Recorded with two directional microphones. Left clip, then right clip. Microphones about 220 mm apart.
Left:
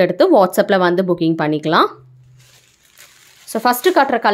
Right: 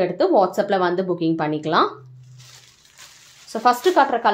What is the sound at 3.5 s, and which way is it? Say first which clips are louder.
Speech: left 3 dB; 35° left (ahead or behind).